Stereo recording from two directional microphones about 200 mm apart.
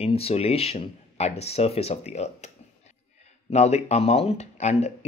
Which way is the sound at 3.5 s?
35° left (ahead or behind).